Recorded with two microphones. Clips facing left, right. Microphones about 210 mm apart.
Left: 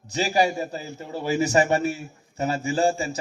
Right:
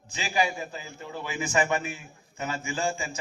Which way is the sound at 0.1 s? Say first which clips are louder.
Left 6 dB; 40° left (ahead or behind).